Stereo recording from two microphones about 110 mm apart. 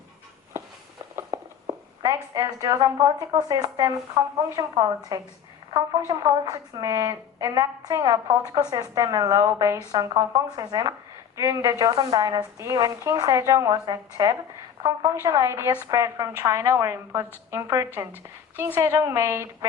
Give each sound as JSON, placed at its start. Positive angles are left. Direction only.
{"t": 1.1, "sound": "a woman's voice", "side_deg": -35}